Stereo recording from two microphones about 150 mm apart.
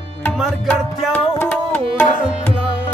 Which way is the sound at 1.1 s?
10° left (ahead or behind).